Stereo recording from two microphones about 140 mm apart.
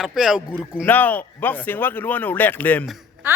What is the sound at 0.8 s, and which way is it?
Speech, 10° left (ahead or behind).